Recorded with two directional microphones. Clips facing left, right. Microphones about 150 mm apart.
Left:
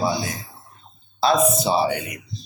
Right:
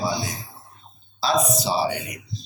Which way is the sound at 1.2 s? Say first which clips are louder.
Left 4 dB; 55° left (ahead or behind).